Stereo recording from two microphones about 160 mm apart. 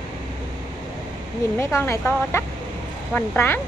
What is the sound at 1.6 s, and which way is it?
Speech, 15° left (ahead or behind).